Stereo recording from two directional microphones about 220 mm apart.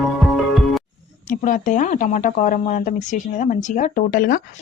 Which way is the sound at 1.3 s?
35° left (ahead or behind).